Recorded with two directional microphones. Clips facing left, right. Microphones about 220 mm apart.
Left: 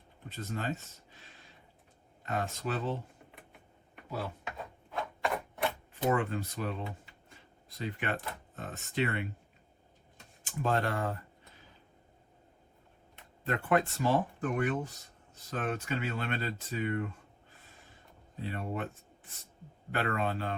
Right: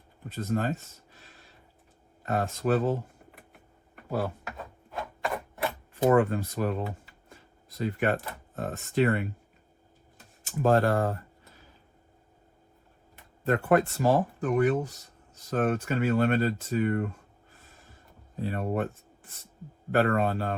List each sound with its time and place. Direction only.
0.3 s speech: 45° right (ahead or behind)
2.2 s speech: 45° right (ahead or behind)
4.4 s a sound: centre (ahead or behind)
5.9 s speech: 45° right (ahead or behind)
10.6 s speech: 45° right (ahead or behind)
13.4 s speech: 45° right (ahead or behind)
18.3 s speech: 45° right (ahead or behind)
19.9 s speech: 45° right (ahead or behind)